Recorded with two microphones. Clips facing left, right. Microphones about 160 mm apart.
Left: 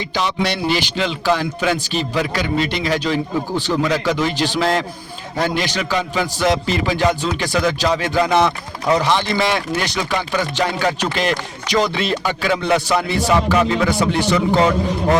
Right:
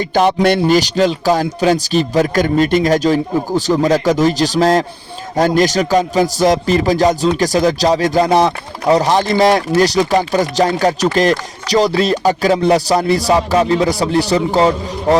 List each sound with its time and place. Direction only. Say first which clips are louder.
0.1 s a man's voice: right 9 dB; 50° right (ahead or behind); by 14.7 s 35° right (ahead or behind)